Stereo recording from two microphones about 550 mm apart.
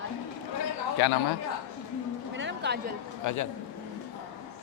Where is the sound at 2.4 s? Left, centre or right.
Centre.